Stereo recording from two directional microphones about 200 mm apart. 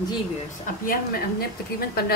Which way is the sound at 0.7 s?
45° left (ahead or behind).